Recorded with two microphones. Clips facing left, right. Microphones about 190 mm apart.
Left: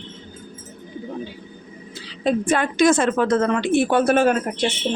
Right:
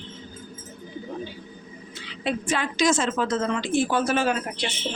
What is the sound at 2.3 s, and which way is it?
A woman's voice, 55° left (ahead or behind).